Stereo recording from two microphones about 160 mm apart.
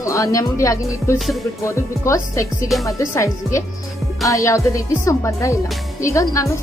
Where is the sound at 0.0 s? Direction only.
20° left (ahead or behind).